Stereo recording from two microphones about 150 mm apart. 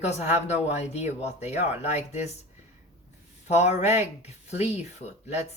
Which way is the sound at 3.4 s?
45° left (ahead or behind).